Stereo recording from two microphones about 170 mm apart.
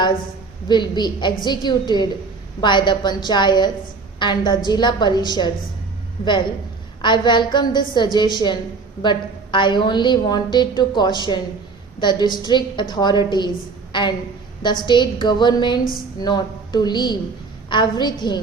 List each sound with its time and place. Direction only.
0.7 s a woman's voice: 25° left (ahead or behind)